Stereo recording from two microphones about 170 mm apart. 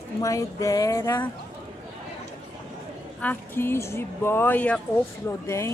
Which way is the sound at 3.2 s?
10° left (ahead or behind).